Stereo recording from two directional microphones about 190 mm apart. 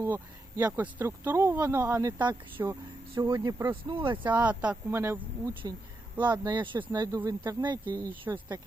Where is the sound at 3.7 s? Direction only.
25° right (ahead or behind).